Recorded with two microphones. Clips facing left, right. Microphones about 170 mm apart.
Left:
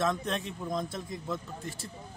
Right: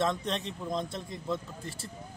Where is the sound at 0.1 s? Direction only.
5° left (ahead or behind).